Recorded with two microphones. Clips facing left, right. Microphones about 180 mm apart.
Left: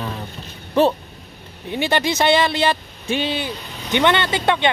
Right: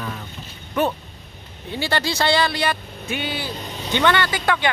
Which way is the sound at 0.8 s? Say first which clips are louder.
Left 5 dB; 30° left (ahead or behind).